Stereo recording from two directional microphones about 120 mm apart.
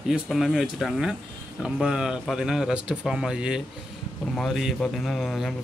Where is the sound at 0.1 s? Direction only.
5° right (ahead or behind).